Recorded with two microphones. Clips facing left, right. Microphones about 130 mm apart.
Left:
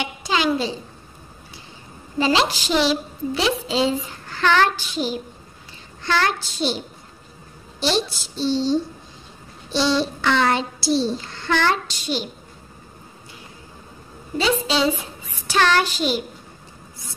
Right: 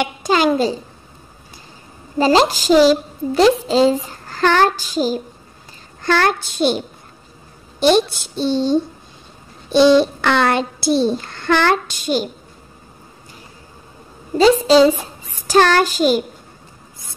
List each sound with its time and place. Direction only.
0.0 s a child's voice: 45° right (ahead or behind)
2.1 s a woman's voice: 40° right (ahead or behind)
3.6 s child singing: 40° right (ahead or behind)
6.0 s a child's voice: 55° right (ahead or behind)
7.8 s a child's voice: 55° right (ahead or behind)
14.3 s a woman's voice: 40° right (ahead or behind)